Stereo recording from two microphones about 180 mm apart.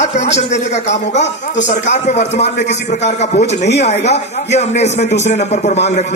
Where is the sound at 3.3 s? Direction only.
70° left (ahead or behind).